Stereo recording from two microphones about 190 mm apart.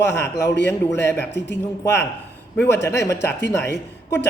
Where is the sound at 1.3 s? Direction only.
65° left (ahead or behind).